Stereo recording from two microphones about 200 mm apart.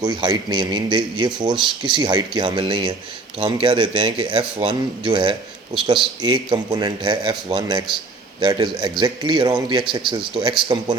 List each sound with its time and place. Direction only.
0.0 s speech: 20° right (ahead or behind)